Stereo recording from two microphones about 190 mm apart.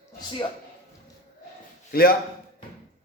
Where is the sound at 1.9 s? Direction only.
50° left (ahead or behind).